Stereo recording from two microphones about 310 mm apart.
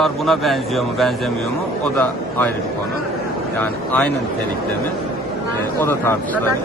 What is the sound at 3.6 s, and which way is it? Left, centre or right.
Speech, centre.